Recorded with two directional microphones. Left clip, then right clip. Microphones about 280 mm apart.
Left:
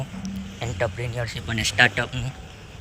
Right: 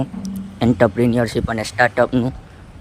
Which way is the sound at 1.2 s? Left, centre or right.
Right.